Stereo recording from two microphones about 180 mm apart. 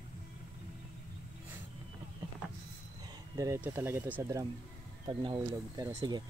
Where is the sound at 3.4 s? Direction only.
15° right (ahead or behind).